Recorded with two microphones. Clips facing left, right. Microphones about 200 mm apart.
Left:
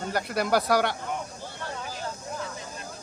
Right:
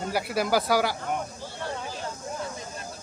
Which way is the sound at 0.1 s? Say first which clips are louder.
Even; 5° right (ahead or behind).